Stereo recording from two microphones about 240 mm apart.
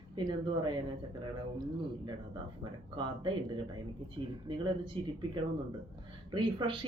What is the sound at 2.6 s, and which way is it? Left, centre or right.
A woman's voice, centre.